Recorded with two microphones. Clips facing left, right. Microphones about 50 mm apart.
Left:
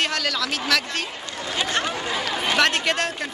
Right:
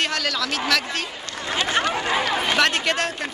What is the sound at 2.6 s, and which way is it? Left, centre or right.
Speech, centre.